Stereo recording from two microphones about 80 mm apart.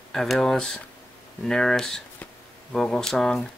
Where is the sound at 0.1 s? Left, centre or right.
Centre.